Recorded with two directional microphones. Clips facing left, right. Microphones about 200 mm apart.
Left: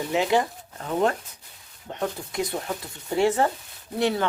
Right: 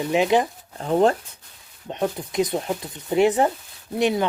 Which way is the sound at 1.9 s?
20° right (ahead or behind).